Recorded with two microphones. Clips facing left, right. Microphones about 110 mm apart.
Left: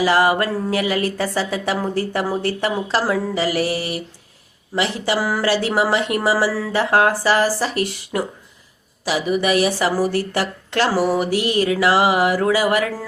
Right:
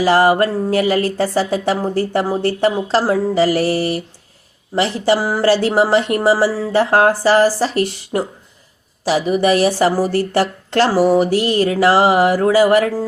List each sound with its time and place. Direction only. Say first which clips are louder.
0.0 s speech: right 4 dB; 35° right (ahead or behind)
11.3 s speech: right 3 dB; 35° right (ahead or behind)